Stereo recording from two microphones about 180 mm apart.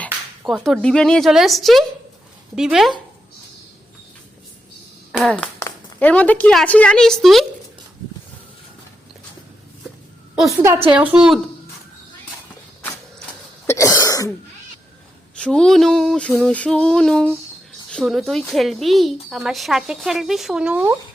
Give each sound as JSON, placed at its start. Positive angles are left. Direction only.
{"t": 0.0, "sound": "a woman's voice", "side_deg": 0}
{"t": 5.1, "sound": "a woman's voice", "side_deg": 5}
{"t": 10.9, "sound": "a woman's voice", "side_deg": -10}
{"t": 13.7, "sound": "cough", "side_deg": 15}
{"t": 15.4, "sound": "a woman's voice", "side_deg": 5}